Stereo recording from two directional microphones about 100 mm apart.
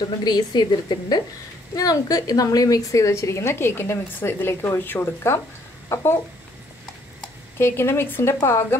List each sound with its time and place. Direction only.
0.0 s a woman's voice: 45° left (ahead or behind); by 5.4 s 25° left (ahead or behind)
7.5 s a woman's voice: 25° left (ahead or behind)